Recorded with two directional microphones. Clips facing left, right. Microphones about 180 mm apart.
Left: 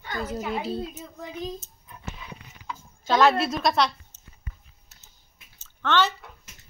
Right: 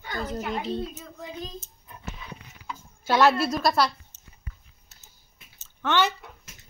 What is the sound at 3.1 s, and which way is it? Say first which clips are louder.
Speech: even; 5° right (ahead or behind).